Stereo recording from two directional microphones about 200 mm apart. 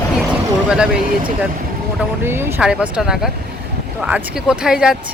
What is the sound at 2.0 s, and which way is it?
Speech, 10° right (ahead or behind).